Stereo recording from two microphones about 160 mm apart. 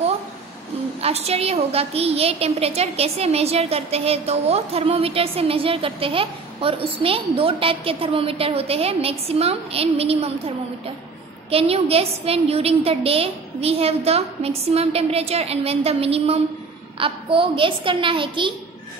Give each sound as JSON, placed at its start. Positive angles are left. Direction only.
{"t": 1.0, "sound": "a woman's voice", "side_deg": -40}
{"t": 11.5, "sound": "a woman's voice", "side_deg": -35}